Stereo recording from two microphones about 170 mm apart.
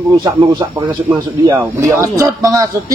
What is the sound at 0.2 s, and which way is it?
Speech, 30° right (ahead or behind).